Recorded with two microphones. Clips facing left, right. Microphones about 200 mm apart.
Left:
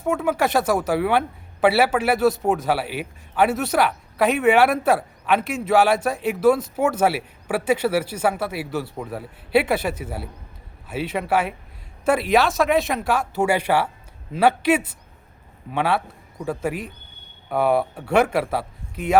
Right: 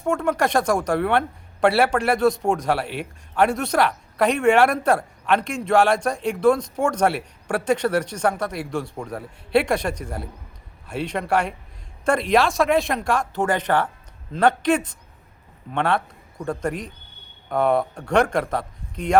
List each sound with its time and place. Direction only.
0.0 s a man's voice: 5° left (ahead or behind)